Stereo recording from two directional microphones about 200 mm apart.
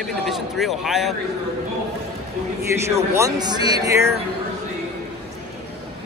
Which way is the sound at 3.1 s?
20° right (ahead or behind).